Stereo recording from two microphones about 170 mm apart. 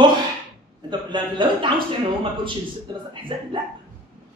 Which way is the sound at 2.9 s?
25° right (ahead or behind).